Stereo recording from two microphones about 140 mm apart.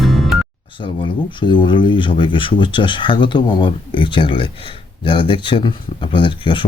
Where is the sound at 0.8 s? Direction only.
35° left (ahead or behind).